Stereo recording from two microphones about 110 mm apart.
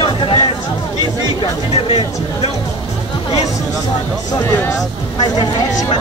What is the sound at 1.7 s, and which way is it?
Speech, 70° left (ahead or behind).